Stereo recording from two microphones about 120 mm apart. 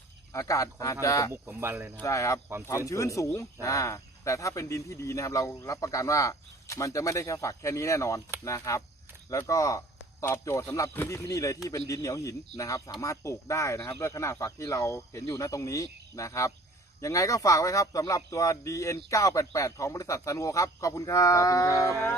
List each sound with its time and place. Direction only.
0.3 s speech: 25° left (ahead or behind)
1.3 s speech: 20° right (ahead or behind)
2.0 s a man's voice: 25° left (ahead or behind)